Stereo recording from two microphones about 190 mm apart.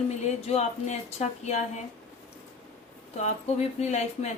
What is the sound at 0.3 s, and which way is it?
Speech, 35° left (ahead or behind).